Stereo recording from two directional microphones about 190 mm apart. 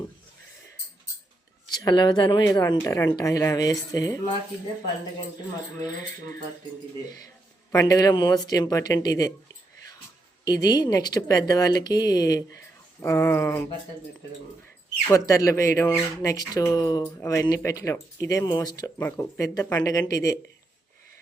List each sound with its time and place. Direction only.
1.6 s speech: 20° left (ahead or behind)
7.7 s speech: 15° left (ahead or behind)
10.4 s speech: 20° left (ahead or behind)
15.1 s speech: 15° left (ahead or behind)